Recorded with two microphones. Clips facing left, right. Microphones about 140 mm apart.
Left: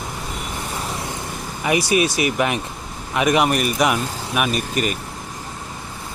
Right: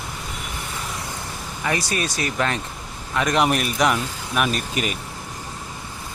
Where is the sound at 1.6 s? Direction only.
15° left (ahead or behind).